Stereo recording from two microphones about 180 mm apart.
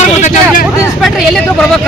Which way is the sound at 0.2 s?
45° left (ahead or behind).